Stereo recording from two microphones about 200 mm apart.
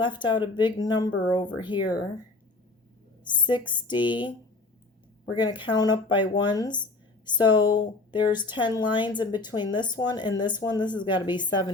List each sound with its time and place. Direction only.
0.0 s a woman's voice: 25° left (ahead or behind)
3.2 s a woman's voice: 25° left (ahead or behind)